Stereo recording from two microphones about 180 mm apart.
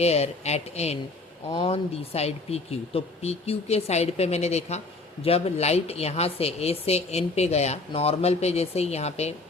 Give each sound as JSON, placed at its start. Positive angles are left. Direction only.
{"t": 0.0, "sound": "speech", "side_deg": 35}